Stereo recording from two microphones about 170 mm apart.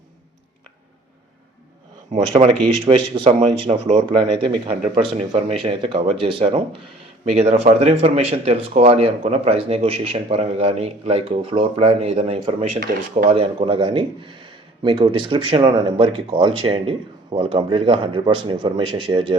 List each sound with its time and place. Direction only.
2.3 s speech: 35° right (ahead or behind)
12.8 s speech: 55° right (ahead or behind)
13.3 s speech: 35° right (ahead or behind)